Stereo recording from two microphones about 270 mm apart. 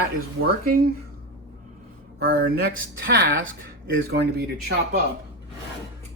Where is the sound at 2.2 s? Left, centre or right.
Right.